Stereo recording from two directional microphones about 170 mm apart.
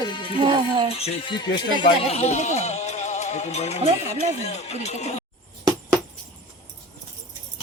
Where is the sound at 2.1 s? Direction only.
40° left (ahead or behind).